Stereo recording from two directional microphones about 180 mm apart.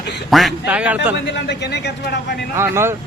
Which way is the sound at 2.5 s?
15° right (ahead or behind).